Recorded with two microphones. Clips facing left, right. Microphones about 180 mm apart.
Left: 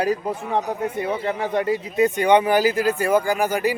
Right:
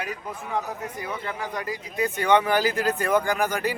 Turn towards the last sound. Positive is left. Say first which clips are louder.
# left 4 dB
turn(degrees=10)  # may be behind; listen again after turning